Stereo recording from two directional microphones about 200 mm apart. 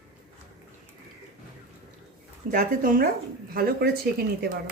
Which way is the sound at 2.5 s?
45° right (ahead or behind).